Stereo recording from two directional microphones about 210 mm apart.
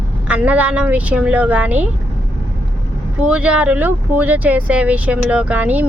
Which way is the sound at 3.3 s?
5° right (ahead or behind).